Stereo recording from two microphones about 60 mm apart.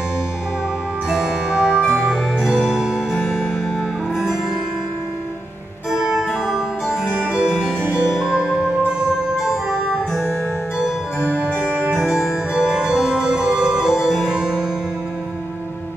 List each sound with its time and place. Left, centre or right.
1.1 s music: centre
2.5 s music: centre
5.9 s music: centre
11.7 s music: right